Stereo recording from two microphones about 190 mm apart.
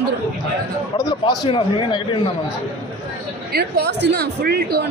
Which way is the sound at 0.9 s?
25° left (ahead or behind).